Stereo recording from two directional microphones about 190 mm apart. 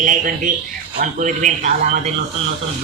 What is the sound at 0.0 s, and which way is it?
A woman's voice, 45° right (ahead or behind).